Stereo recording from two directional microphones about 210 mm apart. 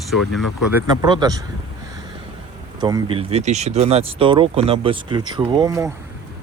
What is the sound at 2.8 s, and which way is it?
Speech, 20° right (ahead or behind).